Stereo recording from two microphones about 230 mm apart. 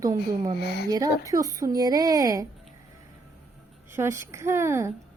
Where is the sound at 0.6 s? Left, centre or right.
Left.